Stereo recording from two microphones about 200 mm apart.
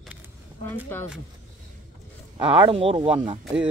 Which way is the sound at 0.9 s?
10° left (ahead or behind).